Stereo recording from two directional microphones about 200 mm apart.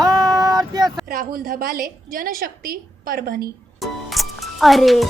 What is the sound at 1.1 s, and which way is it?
A woman's voice, 45° right (ahead or behind).